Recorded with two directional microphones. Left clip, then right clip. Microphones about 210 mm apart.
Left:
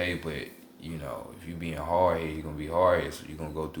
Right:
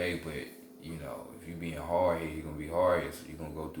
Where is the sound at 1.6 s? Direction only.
40° left (ahead or behind).